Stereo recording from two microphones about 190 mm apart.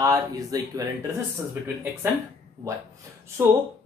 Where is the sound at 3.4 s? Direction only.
15° right (ahead or behind).